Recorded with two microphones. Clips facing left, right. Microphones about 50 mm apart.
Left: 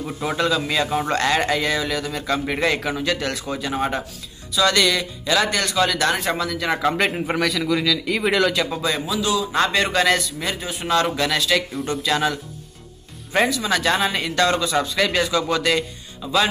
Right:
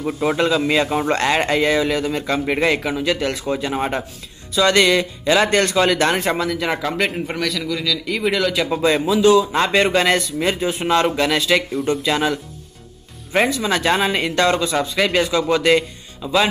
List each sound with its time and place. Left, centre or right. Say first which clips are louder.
0.0 s speech: right 4 dB; centre
6.3 s speech: right 2 dB; centre
6.9 s a man's voice: left 1 dB; centre
8.5 s speech: right 3 dB; centre
9.1 s speech: right 9 dB; right
11.7 s speech: right 3 dB; centre
13.5 s speech: right 2 dB; right
14.8 s speech: right 2 dB; centre